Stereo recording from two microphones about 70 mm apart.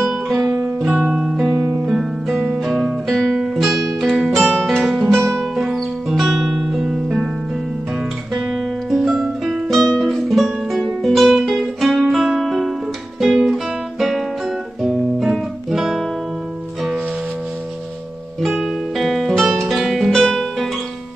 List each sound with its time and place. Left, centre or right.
0.0 s guitar: centre
0.8 s guitar: centre
1.2 s music: centre
2.7 s music: centre
8.4 s music: centre
13.2 s guitar: centre
18.6 s music: centre